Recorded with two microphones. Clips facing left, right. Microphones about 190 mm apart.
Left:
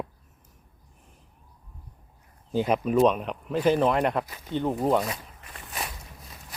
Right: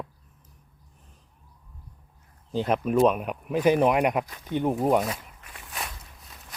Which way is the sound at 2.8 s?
5° right (ahead or behind).